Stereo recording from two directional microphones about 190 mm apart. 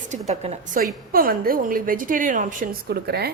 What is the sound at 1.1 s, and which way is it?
A woman's voice, 50° right (ahead or behind).